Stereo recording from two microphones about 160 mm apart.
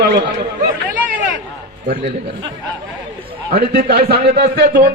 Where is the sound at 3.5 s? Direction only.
65° right (ahead or behind).